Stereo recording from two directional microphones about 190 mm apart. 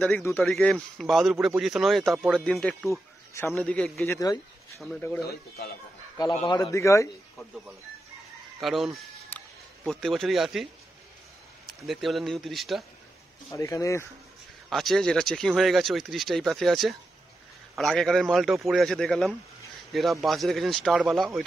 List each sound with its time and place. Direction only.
0.0 s a man's voice: 10° left (ahead or behind)
4.7 s speech: 5° left (ahead or behind)
5.2 s speech: 55° left (ahead or behind)
6.3 s a man's voice: 30° left (ahead or behind)
6.6 s a man's voice: 15° left (ahead or behind)
8.5 s speech: centre (ahead or behind)
11.8 s speech: centre (ahead or behind)
13.5 s a man's voice: 15° left (ahead or behind)
14.7 s speech: centre (ahead or behind)